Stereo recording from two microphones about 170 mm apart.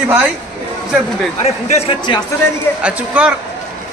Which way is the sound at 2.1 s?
30° left (ahead or behind).